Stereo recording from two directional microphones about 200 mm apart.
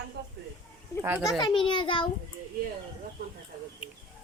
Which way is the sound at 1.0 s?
10° right (ahead or behind).